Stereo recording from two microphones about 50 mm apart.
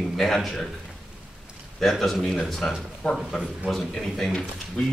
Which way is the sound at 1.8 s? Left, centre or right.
Centre.